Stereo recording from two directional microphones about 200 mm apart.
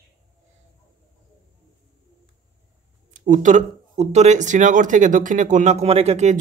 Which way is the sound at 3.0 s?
40° right (ahead or behind).